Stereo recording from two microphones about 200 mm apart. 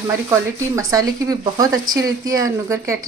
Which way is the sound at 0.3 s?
15° right (ahead or behind).